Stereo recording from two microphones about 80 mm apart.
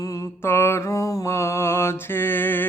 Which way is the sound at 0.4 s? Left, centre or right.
Left.